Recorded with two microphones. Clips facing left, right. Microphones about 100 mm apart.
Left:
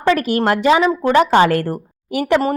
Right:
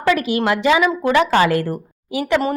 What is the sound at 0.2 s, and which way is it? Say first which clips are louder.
A woman's voice: left 2 dB; 45° left (ahead or behind).